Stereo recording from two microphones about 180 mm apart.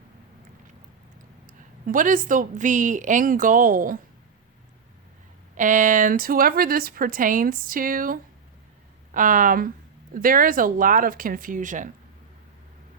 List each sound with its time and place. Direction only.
1.5 s a woman's voice: 50° right (ahead or behind)
5.5 s a woman's voice: 45° right (ahead or behind)